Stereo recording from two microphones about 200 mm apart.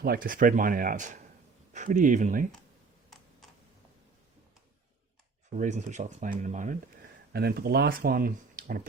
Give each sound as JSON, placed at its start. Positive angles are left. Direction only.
{"t": 0.0, "sound": "speech", "side_deg": -45}
{"t": 5.5, "sound": "speech", "side_deg": -35}
{"t": 7.3, "sound": "speech", "side_deg": -50}